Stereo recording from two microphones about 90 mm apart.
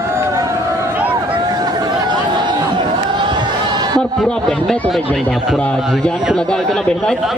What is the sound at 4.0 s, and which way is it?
Speech, 10° left (ahead or behind).